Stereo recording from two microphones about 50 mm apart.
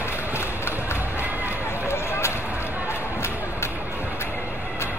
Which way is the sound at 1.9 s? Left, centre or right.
Left.